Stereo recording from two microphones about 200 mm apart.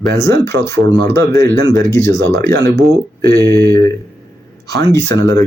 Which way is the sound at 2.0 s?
15° left (ahead or behind).